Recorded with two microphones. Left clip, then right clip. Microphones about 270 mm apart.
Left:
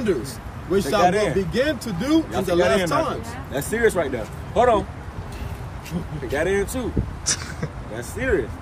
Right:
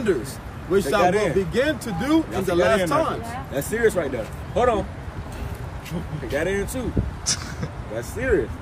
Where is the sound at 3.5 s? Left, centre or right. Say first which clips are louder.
Left 1 dB; centre.